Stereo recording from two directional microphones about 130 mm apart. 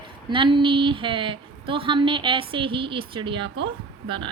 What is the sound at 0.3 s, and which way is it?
A woman's voice, 40° right (ahead or behind).